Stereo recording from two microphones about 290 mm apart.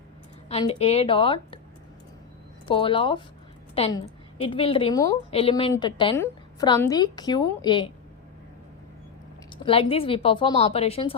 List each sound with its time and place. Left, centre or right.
0.4 s a woman's voice: left
2.6 s a woman's voice: centre
9.6 s a woman's voice: centre